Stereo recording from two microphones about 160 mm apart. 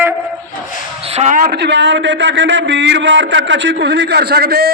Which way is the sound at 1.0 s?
40° right (ahead or behind).